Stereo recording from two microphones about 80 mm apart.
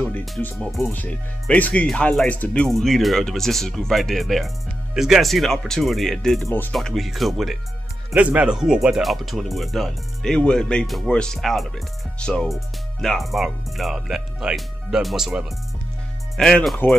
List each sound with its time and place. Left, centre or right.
0.6 s speech: centre
0.9 s speech: left
2.7 s speech: centre
8.1 s speech: centre